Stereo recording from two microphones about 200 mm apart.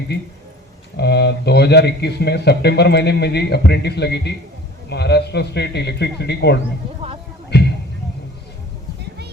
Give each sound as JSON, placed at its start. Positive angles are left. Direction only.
{"t": 0.9, "sound": "speech", "side_deg": 55}